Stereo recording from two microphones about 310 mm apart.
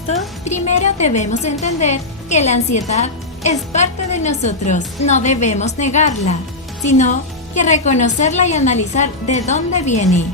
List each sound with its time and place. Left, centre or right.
0.1 s a woman's voice: left